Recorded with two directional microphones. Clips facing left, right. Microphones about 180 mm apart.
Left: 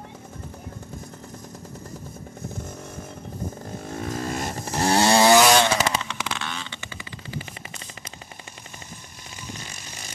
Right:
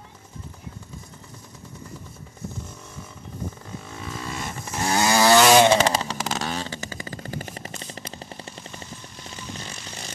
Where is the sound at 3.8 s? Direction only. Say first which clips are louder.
Left 7 dB; 50° left (ahead or behind); by 5.3 s 30° left (ahead or behind).